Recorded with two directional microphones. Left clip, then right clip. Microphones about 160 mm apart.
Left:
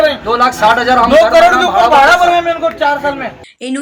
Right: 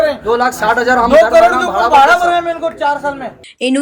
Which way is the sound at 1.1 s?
25° left (ahead or behind).